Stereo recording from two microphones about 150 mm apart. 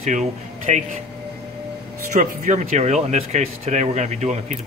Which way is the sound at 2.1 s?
55° right (ahead or behind).